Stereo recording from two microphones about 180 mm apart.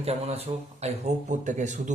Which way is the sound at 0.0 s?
35° right (ahead or behind).